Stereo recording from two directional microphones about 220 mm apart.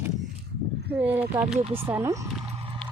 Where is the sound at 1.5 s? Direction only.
30° right (ahead or behind).